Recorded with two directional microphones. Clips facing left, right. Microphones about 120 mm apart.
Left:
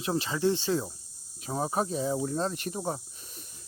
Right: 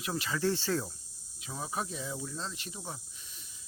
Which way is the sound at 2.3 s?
55° left (ahead or behind).